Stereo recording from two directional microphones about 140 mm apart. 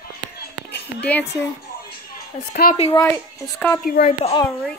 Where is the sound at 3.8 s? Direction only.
90° left.